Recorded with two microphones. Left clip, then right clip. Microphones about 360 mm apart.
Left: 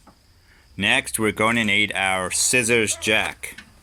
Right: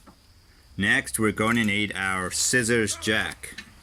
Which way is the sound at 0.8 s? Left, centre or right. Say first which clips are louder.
Left 3 dB; centre.